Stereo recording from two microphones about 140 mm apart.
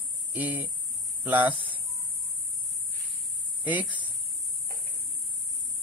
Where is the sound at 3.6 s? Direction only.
10° right (ahead or behind).